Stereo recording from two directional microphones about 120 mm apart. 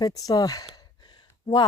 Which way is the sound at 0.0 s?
30° left (ahead or behind).